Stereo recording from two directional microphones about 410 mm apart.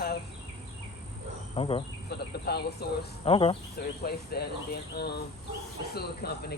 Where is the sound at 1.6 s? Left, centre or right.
Centre.